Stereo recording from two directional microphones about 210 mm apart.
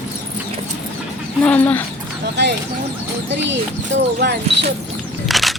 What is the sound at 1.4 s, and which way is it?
Speech, 5° left (ahead or behind).